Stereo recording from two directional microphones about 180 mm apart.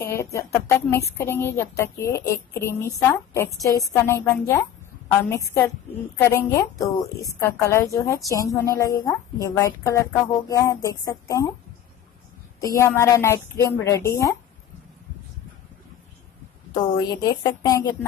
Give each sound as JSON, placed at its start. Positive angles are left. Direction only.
{"t": 0.1, "sound": "a woman's voice", "side_deg": 15}
{"t": 12.7, "sound": "speech", "side_deg": 15}
{"t": 16.7, "sound": "a woman's voice", "side_deg": 25}